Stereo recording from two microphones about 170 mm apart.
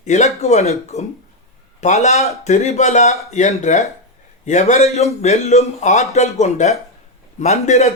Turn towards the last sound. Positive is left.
turn(degrees=40)  # may be behind; listen again after turning